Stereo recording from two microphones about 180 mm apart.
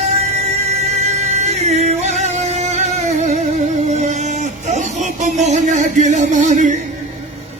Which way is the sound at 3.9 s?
40° right (ahead or behind).